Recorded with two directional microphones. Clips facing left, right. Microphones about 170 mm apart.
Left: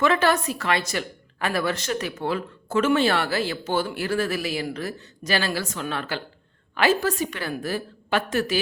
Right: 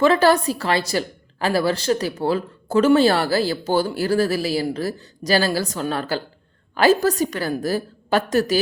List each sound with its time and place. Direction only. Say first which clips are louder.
0.0 s a woman's voice: right 5 dB; 35° right (ahead or behind)